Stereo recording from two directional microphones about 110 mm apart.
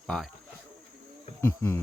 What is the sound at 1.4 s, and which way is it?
Insect, 20° left (ahead or behind).